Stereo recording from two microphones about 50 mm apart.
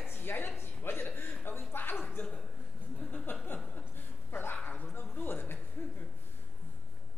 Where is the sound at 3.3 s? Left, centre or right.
Left.